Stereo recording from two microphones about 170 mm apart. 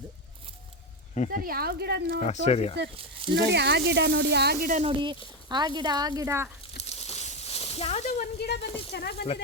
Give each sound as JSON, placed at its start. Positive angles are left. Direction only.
{"t": 1.3, "sound": "speech", "side_deg": -60}
{"t": 2.2, "sound": "speech", "side_deg": 40}
{"t": 3.3, "sound": "speech", "side_deg": -80}
{"t": 4.7, "sound": "speech", "side_deg": -35}
{"t": 6.7, "sound": "a sound", "side_deg": 40}
{"t": 8.4, "sound": "speech", "side_deg": 80}